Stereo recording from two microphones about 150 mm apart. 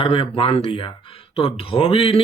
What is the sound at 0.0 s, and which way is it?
A man's voice, 35° left (ahead or behind).